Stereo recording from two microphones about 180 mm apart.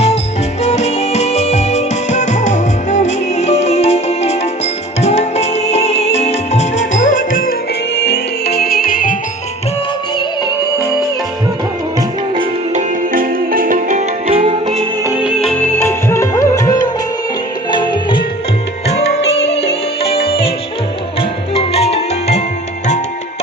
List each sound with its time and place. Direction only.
0.6 s music: 40° left (ahead or behind)
7.9 s music: 70° left (ahead or behind); by 9.1 s 50° left (ahead or behind)
13.1 s music: 50° right (ahead or behind)
14.3 s music: 35° right (ahead or behind)
15.0 s music: 10° right (ahead or behind)
15.8 s music: 15° left (ahead or behind)
18.9 s music: 35° left (ahead or behind)